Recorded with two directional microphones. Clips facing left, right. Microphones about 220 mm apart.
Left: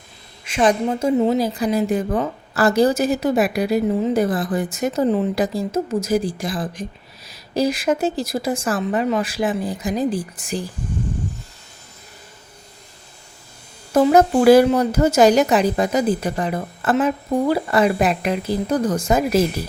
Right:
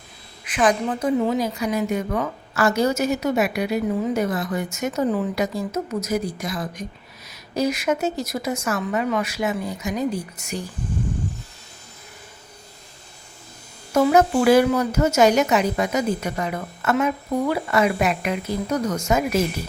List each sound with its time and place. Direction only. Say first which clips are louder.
0.4 s a woman's voice: left 3 dB; 25° left (ahead or behind)
13.9 s speech: left 3 dB; 35° left (ahead or behind)